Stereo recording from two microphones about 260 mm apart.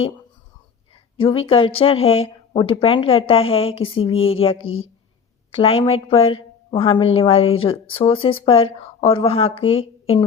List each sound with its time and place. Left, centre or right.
1.1 s a woman's voice: centre